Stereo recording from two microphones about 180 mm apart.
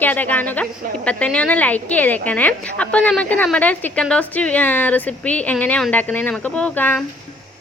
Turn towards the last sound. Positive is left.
turn(degrees=10)  # may be behind; listen again after turning